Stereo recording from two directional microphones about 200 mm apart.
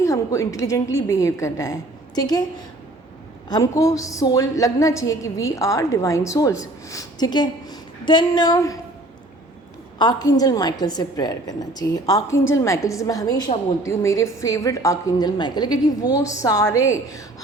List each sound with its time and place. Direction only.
0.0 s a woman's voice: 15° left (ahead or behind)
3.5 s a woman's voice: 15° left (ahead or behind)
10.0 s a woman's voice: 20° left (ahead or behind)